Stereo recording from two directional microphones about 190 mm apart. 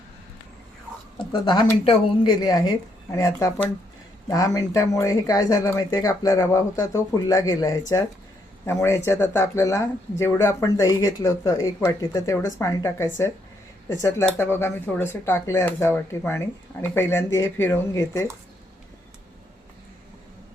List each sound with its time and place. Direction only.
1.3 s speech: 25° left (ahead or behind)